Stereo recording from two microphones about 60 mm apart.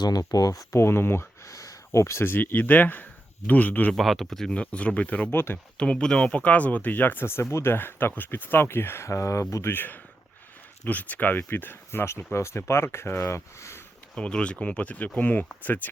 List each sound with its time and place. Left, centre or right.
0.1 s speech: left
0.7 s speech: left
1.5 s a sound: left
2.2 s speech: left
3.9 s speech: centre
4.5 s speech: left
5.3 s speech: left
5.7 s speech: centre; by 9.0 s left
9.0 s speech: left
9.7 s speech: left
14.2 s speech: centre